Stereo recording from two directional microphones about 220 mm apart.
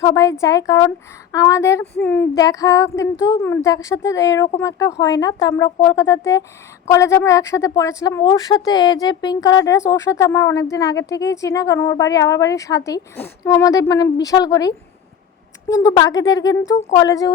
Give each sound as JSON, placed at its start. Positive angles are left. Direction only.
{"t": 0.0, "sound": "speech", "side_deg": 15}
{"t": 15.7, "sound": "speech", "side_deg": 15}